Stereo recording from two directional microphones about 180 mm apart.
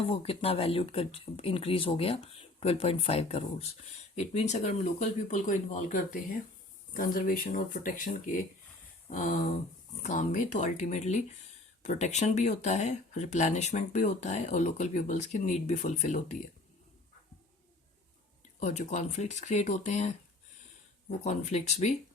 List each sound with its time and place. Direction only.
0.1 s speech: 35° left (ahead or behind)
18.6 s speech: 40° left (ahead or behind)